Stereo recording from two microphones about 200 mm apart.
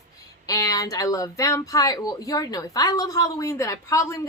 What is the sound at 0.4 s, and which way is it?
Speech, 20° left (ahead or behind).